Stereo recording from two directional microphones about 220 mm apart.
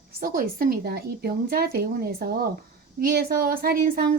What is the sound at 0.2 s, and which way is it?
A woman's voice, 40° right (ahead or behind).